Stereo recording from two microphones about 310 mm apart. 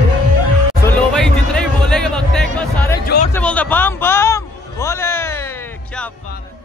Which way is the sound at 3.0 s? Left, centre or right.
Left.